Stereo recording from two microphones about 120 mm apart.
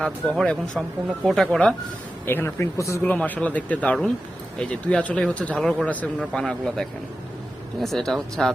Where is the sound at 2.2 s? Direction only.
20° left (ahead or behind).